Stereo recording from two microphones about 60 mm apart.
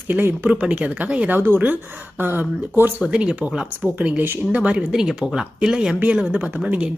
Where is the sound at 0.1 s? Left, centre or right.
Right.